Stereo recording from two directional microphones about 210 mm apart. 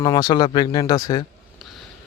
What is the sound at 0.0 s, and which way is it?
Speech, 20° left (ahead or behind).